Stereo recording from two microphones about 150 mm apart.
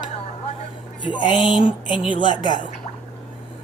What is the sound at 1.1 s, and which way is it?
Speech, 30° left (ahead or behind).